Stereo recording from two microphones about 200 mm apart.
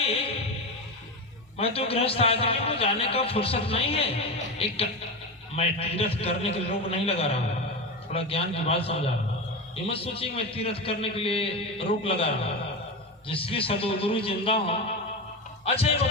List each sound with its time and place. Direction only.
0.0 s music: 30° left (ahead or behind)
1.5 s a man's voice: 30° left (ahead or behind)